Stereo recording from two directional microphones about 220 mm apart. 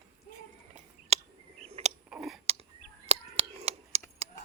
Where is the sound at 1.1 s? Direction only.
30° right (ahead or behind).